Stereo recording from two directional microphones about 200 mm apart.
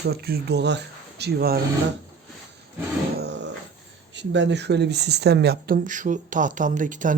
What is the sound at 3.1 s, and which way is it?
Dog, 55° right (ahead or behind).